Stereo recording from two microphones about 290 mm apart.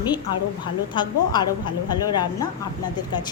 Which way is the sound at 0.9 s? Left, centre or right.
Centre.